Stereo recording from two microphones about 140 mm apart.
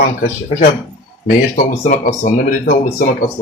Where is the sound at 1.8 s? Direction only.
60° left (ahead or behind).